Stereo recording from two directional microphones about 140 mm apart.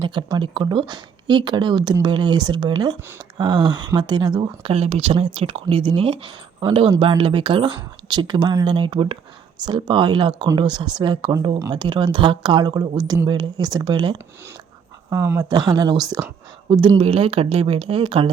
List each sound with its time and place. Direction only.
0.0 s speech: 35° right (ahead or behind)
4.7 s speech: 45° right (ahead or behind)
15.1 s speech: 20° right (ahead or behind)
15.4 s speech: 30° right (ahead or behind)